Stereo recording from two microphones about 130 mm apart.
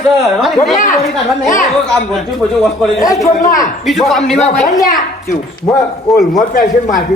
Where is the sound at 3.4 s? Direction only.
90° left.